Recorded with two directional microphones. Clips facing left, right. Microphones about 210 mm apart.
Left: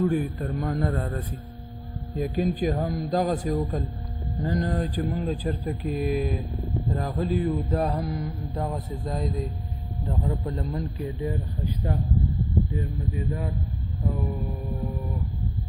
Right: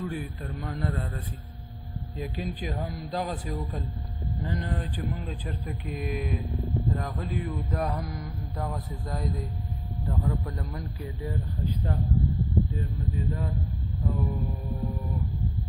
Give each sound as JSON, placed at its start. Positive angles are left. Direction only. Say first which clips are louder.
{"t": 0.0, "sound": "a man's voice", "louder": "left 9 dB", "side_deg": 45}